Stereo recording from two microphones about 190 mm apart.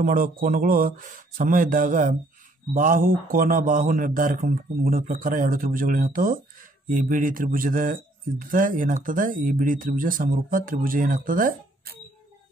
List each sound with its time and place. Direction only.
0.0 s a man's voice: 50° right (ahead or behind)